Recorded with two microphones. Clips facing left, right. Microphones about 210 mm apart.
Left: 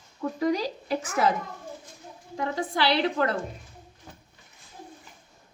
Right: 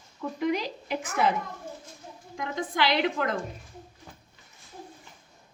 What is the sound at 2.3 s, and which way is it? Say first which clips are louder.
A woman's voice: left 3 dB; 35° left (ahead or behind).